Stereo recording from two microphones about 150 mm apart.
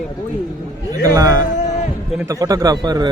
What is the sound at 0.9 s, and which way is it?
Speech, 25° right (ahead or behind).